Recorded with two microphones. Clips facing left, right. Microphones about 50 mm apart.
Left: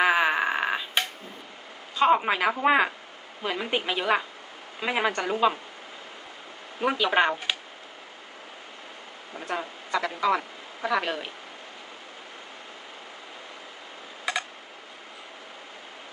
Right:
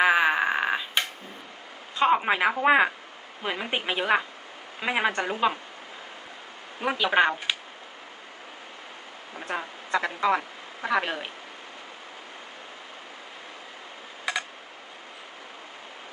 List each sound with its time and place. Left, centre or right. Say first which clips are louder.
0.0 s a sound: right 1 dB; centre
2.0 s speech: even; centre
6.8 s speech: even; centre
9.3 s speech: left 1 dB; centre